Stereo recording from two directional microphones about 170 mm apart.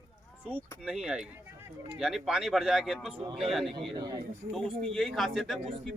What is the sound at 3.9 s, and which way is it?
Speech, 20° right (ahead or behind).